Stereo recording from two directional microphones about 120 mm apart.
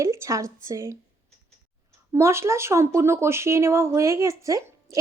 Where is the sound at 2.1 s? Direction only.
20° right (ahead or behind).